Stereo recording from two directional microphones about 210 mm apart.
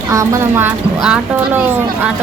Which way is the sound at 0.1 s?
15° right (ahead or behind).